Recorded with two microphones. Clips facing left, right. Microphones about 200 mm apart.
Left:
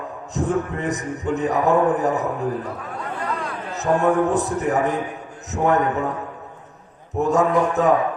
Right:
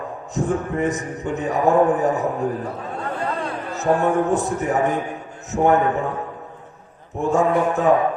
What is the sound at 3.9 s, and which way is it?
Speech, 35° right (ahead or behind).